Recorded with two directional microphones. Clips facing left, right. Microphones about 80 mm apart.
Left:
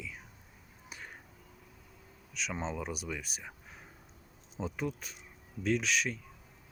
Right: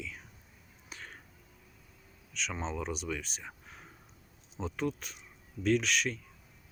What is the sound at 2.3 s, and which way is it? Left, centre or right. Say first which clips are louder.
Speech: even; centre.